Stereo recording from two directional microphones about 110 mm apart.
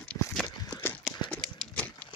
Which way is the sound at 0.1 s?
10° left (ahead or behind).